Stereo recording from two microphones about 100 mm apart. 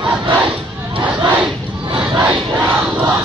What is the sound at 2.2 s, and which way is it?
Crowd, 30° right (ahead or behind).